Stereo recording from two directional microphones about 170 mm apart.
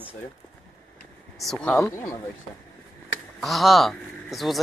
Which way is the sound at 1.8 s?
15° left (ahead or behind).